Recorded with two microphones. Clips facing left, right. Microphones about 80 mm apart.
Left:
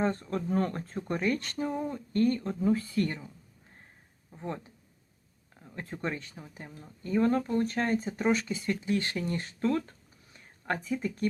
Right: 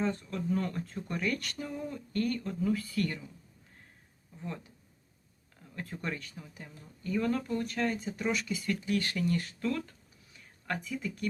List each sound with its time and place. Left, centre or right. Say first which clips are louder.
0.0 s speech: left 3 dB; left
4.3 s speech: left 4 dB; left